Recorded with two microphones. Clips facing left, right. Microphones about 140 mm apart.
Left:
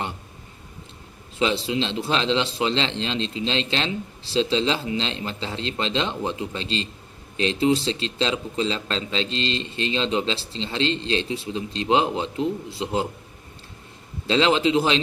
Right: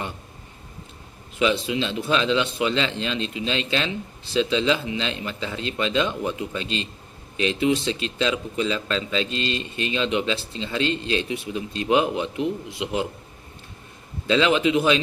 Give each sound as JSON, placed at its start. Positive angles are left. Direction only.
{"t": 1.4, "sound": "speech", "side_deg": 30}
{"t": 14.3, "sound": "speech", "side_deg": 30}